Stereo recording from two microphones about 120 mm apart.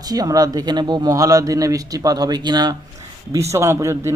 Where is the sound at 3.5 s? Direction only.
25° right (ahead or behind).